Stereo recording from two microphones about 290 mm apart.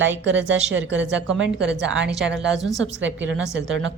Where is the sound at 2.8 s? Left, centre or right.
Right.